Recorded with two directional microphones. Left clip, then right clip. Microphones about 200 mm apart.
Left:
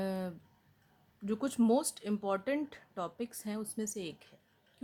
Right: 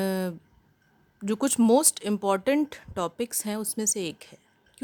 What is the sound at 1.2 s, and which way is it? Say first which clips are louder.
Speech: right 8 dB; 50° right (ahead or behind).